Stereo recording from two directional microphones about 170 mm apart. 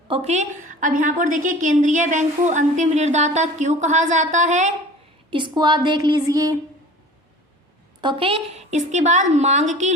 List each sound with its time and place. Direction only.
0.1 s a woman's voice: 40° right (ahead or behind)
5.3 s a woman's voice: 25° right (ahead or behind)
8.0 s a woman's voice: 30° right (ahead or behind)